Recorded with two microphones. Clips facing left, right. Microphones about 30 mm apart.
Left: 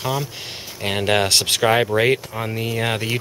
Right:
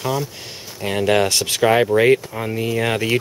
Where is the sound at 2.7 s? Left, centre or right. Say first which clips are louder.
Right 2 dB; centre.